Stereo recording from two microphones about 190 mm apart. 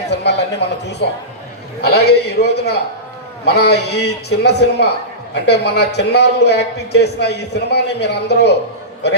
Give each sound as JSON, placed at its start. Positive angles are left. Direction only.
{"t": 0.1, "sound": "a man's voice", "side_deg": 65}